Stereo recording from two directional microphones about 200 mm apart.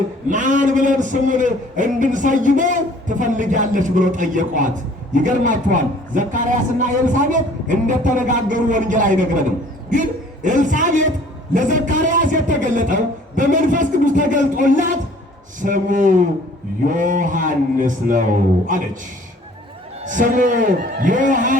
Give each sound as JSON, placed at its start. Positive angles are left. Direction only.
{"t": 0.3, "sound": "a man's voice", "side_deg": -40}
{"t": 20.1, "sound": "a man's voice", "side_deg": -40}